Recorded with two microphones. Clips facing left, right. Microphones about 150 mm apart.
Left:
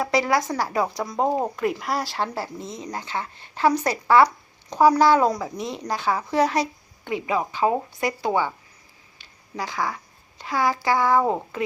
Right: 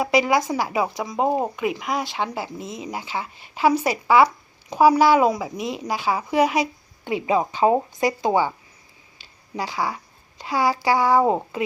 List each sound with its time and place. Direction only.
0.0 s a woman's voice: 5° right (ahead or behind)
7.1 s speech: 20° right (ahead or behind)
9.5 s a woman's voice: 15° right (ahead or behind)
9.9 s a sound: 20° right (ahead or behind)
10.8 s a woman's voice: 10° right (ahead or behind)